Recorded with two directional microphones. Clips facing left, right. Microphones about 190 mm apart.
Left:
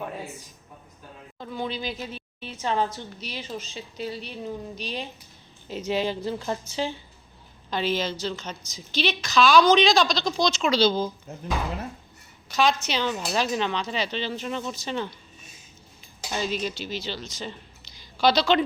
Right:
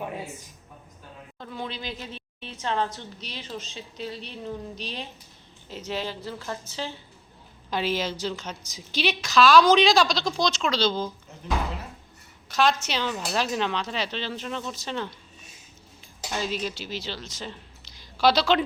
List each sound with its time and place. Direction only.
1.4 s a woman's voice: 5° left (ahead or behind)
5.6 s a woman's voice: 15° left (ahead or behind)
7.7 s a woman's voice: 10° right (ahead or behind); by 11.1 s 10° left (ahead or behind)
12.5 s a woman's voice: 5° right (ahead or behind)
16.3 s speech: centre (ahead or behind)